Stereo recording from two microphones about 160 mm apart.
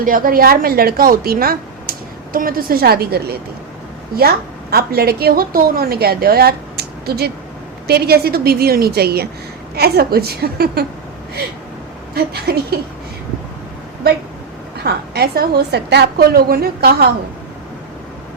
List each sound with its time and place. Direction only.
0.0 s speech: 60° right (ahead or behind); by 3.3 s 75° right (ahead or behind)
4.7 s speech: 75° right (ahead or behind)
12.1 s speech: 80° right
14.8 s speech: 80° right